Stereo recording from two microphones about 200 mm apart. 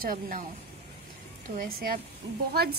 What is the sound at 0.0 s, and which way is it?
Speech, 45° right (ahead or behind).